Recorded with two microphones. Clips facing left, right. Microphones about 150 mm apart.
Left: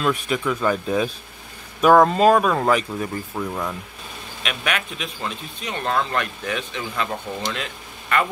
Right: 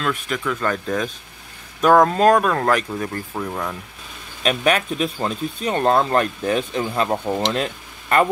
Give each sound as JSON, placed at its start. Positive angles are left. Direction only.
{"t": 0.0, "sound": "speech", "side_deg": 10}
{"t": 4.4, "sound": "speech", "side_deg": -35}